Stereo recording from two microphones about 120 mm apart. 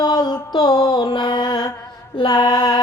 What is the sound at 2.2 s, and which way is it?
Mantra, 40° left (ahead or behind).